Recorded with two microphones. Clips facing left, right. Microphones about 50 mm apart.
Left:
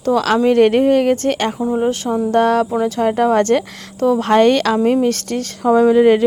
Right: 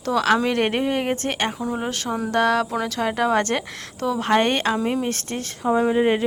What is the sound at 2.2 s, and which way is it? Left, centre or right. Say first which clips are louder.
Speech: left 5 dB; right.